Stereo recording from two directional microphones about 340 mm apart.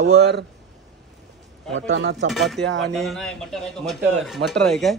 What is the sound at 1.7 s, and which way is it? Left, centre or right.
Speech, right.